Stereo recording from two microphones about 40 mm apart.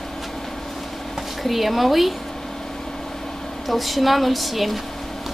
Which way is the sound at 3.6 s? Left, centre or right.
Centre.